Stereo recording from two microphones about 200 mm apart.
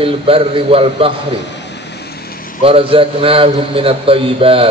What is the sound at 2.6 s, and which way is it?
A man's voice, 25° right (ahead or behind).